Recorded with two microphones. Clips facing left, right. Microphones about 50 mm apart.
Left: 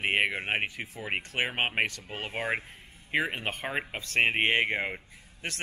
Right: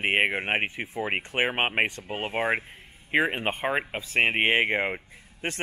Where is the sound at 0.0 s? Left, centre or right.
Right.